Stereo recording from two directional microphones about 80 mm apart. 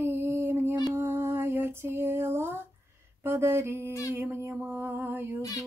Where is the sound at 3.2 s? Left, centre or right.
Right.